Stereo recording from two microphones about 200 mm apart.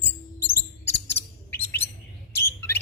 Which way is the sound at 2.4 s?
10° left (ahead or behind).